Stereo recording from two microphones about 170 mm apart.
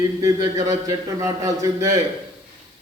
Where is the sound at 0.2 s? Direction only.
20° right (ahead or behind).